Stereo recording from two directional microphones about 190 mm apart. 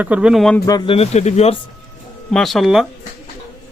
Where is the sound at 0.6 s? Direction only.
20° left (ahead or behind).